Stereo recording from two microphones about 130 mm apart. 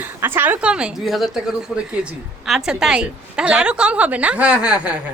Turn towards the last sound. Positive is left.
turn(degrees=-10)  # may be behind; listen again after turning